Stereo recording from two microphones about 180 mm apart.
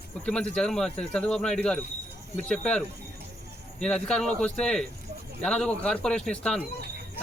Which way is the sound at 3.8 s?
5° left (ahead or behind).